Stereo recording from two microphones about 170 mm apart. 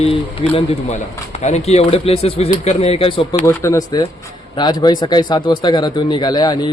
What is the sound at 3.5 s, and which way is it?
Speech, 15° left (ahead or behind).